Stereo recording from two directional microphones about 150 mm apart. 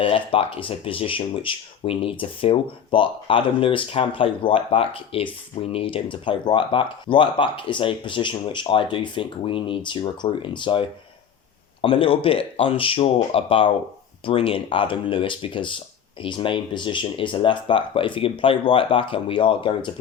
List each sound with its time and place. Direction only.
0.0 s speech: 40° left (ahead or behind)